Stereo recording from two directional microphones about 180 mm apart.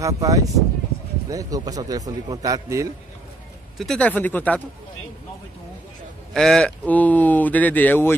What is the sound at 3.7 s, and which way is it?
Speech, 5° left (ahead or behind).